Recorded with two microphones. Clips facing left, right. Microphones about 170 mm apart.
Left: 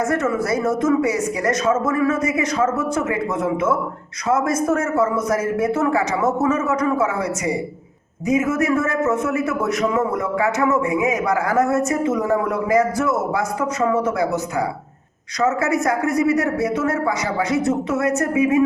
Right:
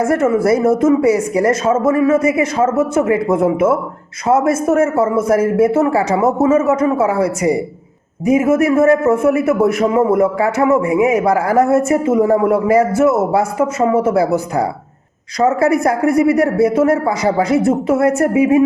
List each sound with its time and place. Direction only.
0.0 s a man's voice: 30° right (ahead or behind)